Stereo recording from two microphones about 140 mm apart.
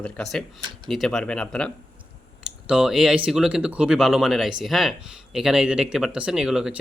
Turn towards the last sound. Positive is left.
turn(degrees=-5)  # may be behind; listen again after turning